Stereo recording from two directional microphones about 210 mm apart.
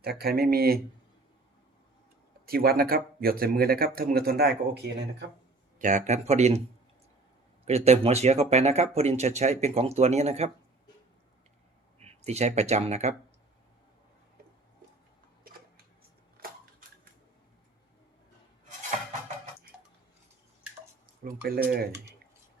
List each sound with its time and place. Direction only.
0.0 s speech: 50° right (ahead or behind)
2.5 s speech: 45° right (ahead or behind)
5.8 s speech: 35° right (ahead or behind)
7.6 s speech: 30° right (ahead or behind)
11.9 s speech: 30° right (ahead or behind)
21.2 s speech: 45° right (ahead or behind)